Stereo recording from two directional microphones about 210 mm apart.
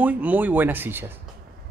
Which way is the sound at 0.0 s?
5° right (ahead or behind).